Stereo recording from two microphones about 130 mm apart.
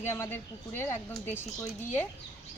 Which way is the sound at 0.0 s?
20° left (ahead or behind).